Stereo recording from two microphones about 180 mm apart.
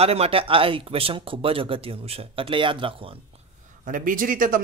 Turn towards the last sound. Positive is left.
turn(degrees=-50)  # may be behind; listen again after turning